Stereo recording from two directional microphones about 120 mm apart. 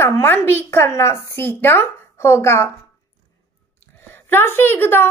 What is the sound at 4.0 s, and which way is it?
A woman's voice, 15° left (ahead or behind).